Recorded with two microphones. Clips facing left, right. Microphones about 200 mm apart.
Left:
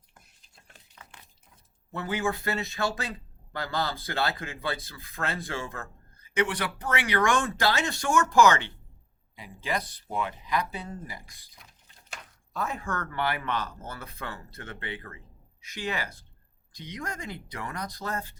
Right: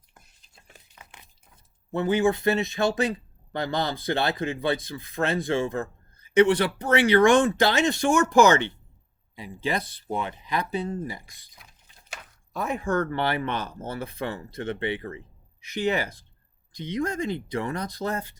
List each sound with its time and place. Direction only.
0.7 s a sound: 15° right (ahead or behind)
1.9 s speech: 20° right (ahead or behind)
12.5 s speech: 20° right (ahead or behind)